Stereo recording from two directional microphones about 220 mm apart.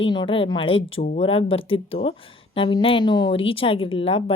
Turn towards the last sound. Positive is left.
turn(degrees=25)  # may be behind; listen again after turning